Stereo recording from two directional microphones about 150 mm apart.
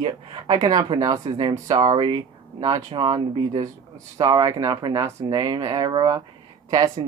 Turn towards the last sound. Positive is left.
turn(degrees=-25)  # may be behind; listen again after turning